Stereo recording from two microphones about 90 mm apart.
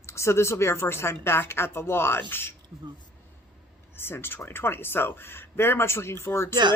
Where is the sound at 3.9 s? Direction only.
25° left (ahead or behind).